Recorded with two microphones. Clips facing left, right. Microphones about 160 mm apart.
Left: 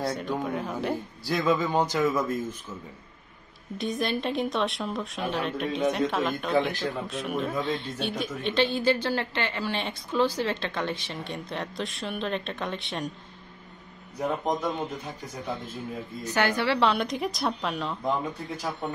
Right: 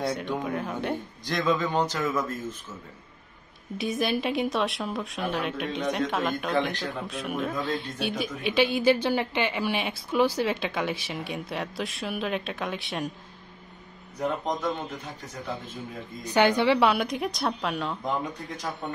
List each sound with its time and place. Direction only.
0.0 s a man's voice: centre (ahead or behind)
3.7 s a man's voice: 5° right (ahead or behind)
14.2 s a man's voice: 10° left (ahead or behind)
16.3 s a woman's voice: 20° right (ahead or behind)
16.9 s a man's voice: centre (ahead or behind)